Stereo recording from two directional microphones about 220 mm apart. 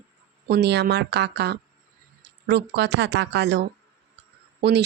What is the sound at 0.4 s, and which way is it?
Speech, 45° right (ahead or behind).